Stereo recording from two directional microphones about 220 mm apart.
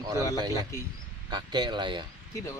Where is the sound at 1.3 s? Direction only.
20° right (ahead or behind).